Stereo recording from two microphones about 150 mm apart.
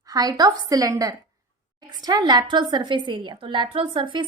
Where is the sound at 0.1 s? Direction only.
25° right (ahead or behind).